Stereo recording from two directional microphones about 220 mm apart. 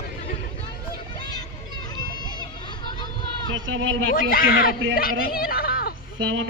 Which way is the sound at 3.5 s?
60° right (ahead or behind).